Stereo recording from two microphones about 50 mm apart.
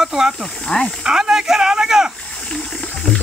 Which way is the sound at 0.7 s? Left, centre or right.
Centre.